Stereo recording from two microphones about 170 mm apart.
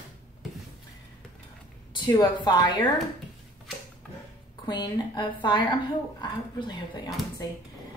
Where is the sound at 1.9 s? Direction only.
25° left (ahead or behind).